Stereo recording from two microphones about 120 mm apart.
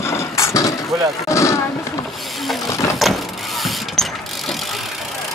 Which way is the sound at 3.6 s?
Centre (ahead or behind).